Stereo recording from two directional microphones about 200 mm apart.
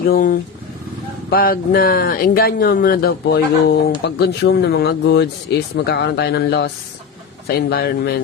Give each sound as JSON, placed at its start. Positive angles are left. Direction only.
{"t": 0.1, "sound": "speech", "side_deg": 45}